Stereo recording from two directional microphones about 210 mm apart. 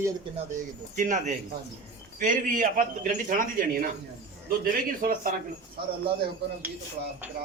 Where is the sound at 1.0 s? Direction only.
35° right (ahead or behind).